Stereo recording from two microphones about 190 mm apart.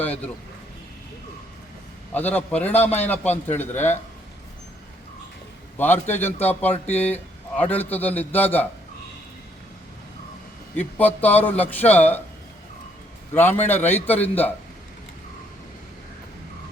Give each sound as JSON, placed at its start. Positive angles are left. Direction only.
{"t": 0.0, "sound": "a sound", "side_deg": 10}
{"t": 2.1, "sound": "a man's voice", "side_deg": 10}
{"t": 5.7, "sound": "a man's voice", "side_deg": 10}
{"t": 10.8, "sound": "a man's voice", "side_deg": 10}
{"t": 13.3, "sound": "a man's voice", "side_deg": 10}